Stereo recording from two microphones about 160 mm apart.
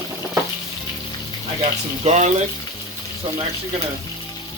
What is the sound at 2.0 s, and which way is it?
Speech, 45° right (ahead or behind).